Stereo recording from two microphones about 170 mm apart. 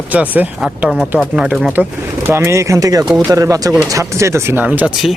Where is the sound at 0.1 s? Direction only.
10° right (ahead or behind).